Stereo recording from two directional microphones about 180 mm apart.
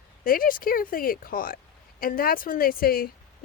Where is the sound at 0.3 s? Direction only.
50° left (ahead or behind).